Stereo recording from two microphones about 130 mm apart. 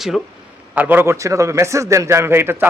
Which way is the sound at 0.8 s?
15° right (ahead or behind).